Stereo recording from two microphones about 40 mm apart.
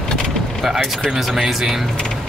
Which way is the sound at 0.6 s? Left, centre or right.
Centre.